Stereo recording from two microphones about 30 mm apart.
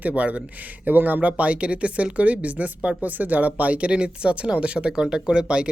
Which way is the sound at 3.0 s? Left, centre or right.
Right.